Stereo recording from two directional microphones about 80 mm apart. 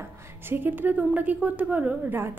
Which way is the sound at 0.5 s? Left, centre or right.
Right.